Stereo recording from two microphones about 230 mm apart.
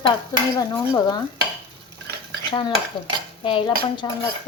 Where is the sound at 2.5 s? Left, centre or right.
Left.